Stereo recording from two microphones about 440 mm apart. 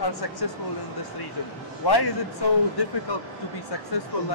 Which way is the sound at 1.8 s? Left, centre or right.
Left.